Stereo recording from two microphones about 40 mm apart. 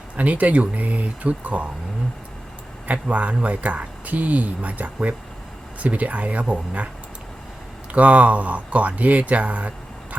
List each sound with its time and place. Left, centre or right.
0.2 s speech: right
2.8 s speech: right
7.9 s speech: right